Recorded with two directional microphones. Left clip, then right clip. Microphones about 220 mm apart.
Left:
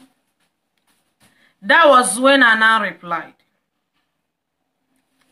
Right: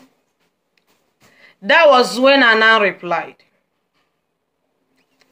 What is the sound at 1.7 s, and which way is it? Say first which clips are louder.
Speech: right 1 dB; 45° left (ahead or behind).